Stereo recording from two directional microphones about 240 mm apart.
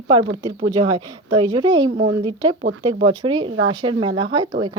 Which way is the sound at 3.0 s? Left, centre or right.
Centre.